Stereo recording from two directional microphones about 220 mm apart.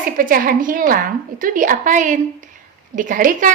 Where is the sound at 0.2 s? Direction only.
40° right (ahead or behind).